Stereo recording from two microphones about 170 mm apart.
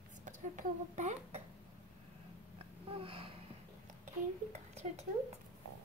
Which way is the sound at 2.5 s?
35° right (ahead or behind).